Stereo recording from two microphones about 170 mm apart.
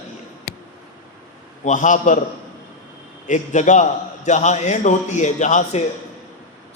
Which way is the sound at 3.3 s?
45° left (ahead or behind).